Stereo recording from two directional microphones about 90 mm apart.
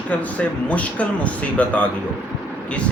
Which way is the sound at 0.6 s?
15° left (ahead or behind).